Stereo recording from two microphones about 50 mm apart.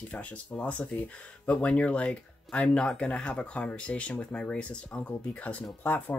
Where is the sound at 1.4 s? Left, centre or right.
Left.